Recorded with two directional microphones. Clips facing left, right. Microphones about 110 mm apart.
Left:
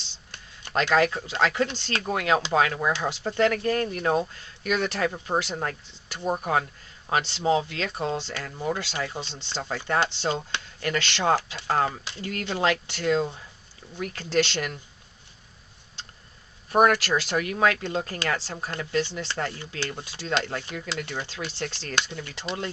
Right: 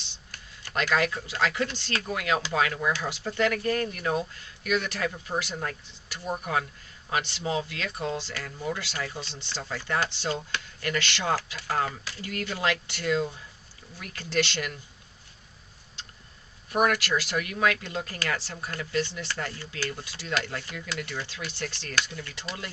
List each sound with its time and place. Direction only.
0.3 s speech: 30° left (ahead or behind)
9.6 s speech: 45° left (ahead or behind)
10.0 s speech: 25° left (ahead or behind)
16.7 s speech: 35° left (ahead or behind)